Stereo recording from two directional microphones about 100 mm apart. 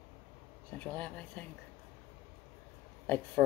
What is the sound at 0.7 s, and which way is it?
Speech, 15° left (ahead or behind).